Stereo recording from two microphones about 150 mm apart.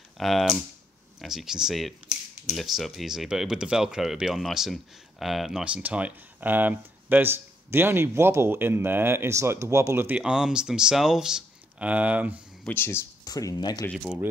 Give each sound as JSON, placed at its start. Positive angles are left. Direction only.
{"t": 0.2, "sound": "speech", "side_deg": 0}
{"t": 12.6, "sound": "speech", "side_deg": 15}